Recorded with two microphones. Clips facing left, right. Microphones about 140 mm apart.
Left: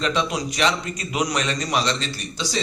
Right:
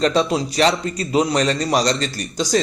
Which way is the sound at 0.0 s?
35° right (ahead or behind).